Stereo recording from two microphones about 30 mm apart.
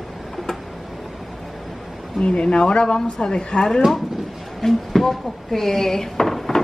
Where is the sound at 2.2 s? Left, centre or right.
Left.